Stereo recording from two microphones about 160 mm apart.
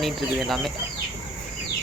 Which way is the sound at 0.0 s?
Centre (ahead or behind).